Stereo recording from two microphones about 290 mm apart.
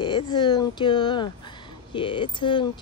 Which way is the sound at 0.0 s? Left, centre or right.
Centre.